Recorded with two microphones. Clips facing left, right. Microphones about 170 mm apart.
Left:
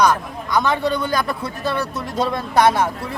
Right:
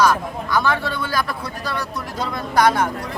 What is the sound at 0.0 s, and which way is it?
Speech, 20° left (ahead or behind).